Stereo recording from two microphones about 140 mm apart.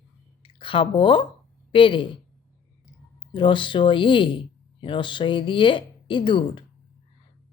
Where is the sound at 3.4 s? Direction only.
35° left (ahead or behind).